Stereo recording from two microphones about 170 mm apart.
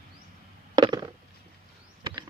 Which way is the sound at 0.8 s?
25° right (ahead or behind).